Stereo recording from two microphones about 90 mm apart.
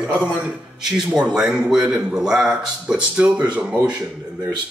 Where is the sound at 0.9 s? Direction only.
5° right (ahead or behind).